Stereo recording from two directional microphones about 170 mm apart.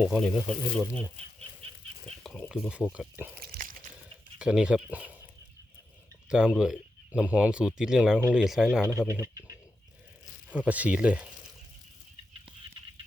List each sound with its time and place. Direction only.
0.0 s speech: 5° right (ahead or behind)
2.2 s speech: 5° left (ahead or behind)
3.4 s a sound: 60° right (ahead or behind)
4.4 s speech: 5° right (ahead or behind)
6.2 s speech: 5° right (ahead or behind)
8.9 s speech: 15° right (ahead or behind)
10.7 s speech: 10° right (ahead or behind)